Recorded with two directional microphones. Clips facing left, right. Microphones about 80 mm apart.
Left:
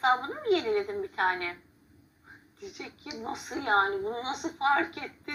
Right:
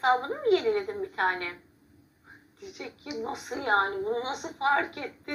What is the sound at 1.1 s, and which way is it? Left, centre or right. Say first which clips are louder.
Speech: even; right.